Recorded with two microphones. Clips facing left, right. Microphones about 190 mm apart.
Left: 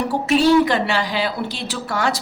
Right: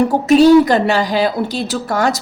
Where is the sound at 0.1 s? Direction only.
40° right (ahead or behind).